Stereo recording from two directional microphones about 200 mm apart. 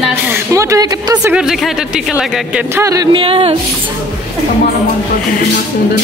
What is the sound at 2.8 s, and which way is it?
Speech, 15° right (ahead or behind).